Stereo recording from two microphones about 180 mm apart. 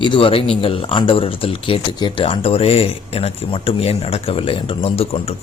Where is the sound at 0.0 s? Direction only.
30° left (ahead or behind).